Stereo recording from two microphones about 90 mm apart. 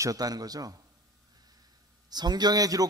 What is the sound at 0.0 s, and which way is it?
Speech, 45° right (ahead or behind).